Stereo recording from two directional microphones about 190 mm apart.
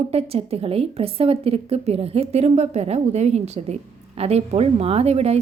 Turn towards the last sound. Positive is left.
turn(degrees=-35)  # may be behind; listen again after turning